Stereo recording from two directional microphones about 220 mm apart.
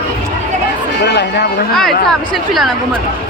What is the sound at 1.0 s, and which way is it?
Speech, 50° left (ahead or behind).